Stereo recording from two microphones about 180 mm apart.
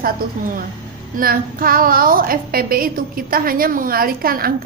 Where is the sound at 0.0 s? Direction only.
50° right (ahead or behind).